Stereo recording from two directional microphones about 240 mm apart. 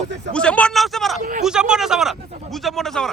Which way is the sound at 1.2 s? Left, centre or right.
Right.